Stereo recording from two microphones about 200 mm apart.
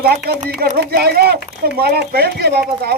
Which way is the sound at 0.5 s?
50° right (ahead or behind).